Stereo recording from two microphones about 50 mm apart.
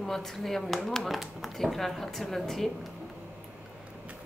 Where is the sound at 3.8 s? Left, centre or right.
Right.